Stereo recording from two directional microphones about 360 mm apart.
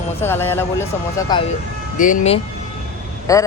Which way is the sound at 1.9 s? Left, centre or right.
Left.